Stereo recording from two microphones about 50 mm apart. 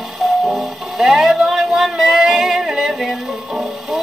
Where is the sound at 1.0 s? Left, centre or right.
Centre.